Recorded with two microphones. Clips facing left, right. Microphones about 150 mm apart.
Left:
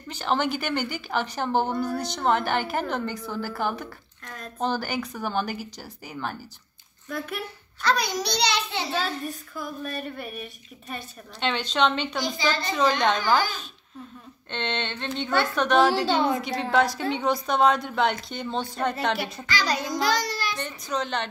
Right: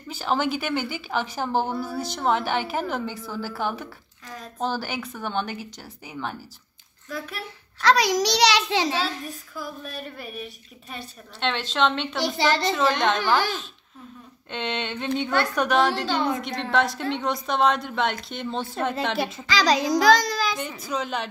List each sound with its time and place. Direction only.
0.1 s a woman's voice: 5° right (ahead or behind)
7.8 s a child's voice: 90° right
9.2 s a woman's voice: centre (ahead or behind)
12.2 s a woman's voice: 70° right (ahead or behind)
12.7 s a woman's voice: centre (ahead or behind)
14.5 s a woman's voice: 5° right (ahead or behind)
19.4 s a child's voice: 90° right
20.5 s a woman's voice: 5° right (ahead or behind)